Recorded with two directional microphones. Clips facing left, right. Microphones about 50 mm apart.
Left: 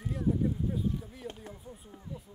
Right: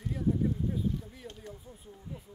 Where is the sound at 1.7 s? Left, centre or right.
Left.